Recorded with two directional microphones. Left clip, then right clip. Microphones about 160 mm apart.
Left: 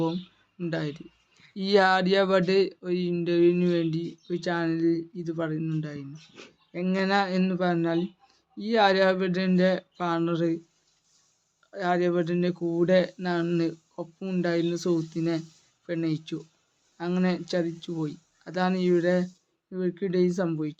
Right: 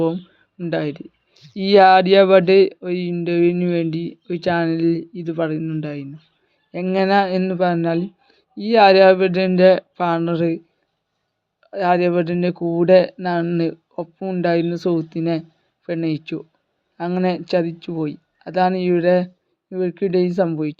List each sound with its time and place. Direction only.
0.7 s speech: 40° right (ahead or behind)
10.2 s speech: 40° right (ahead or behind)
11.7 s speech: 45° right (ahead or behind)
14.4 s speech: 40° right (ahead or behind)